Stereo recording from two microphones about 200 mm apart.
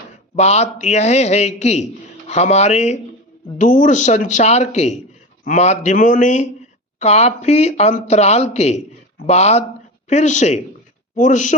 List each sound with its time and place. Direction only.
0.3 s speech: 35° left (ahead or behind)